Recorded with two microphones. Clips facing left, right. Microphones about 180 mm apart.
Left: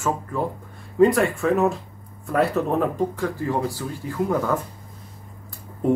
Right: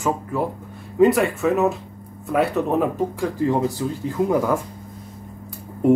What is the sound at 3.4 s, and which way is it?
Speech, 20° right (ahead or behind).